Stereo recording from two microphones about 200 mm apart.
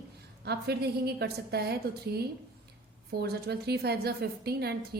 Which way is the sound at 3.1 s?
55° right (ahead or behind).